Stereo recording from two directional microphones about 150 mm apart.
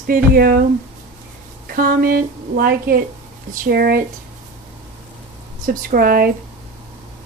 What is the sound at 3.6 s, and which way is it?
Speech, 90° right.